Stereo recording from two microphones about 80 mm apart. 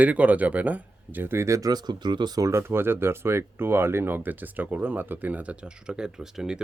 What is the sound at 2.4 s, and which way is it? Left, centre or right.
Speech, right.